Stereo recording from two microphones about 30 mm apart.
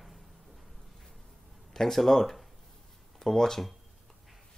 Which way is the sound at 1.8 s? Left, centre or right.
Centre.